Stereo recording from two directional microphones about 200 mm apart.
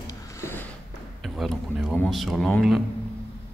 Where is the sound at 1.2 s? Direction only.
Centre (ahead or behind).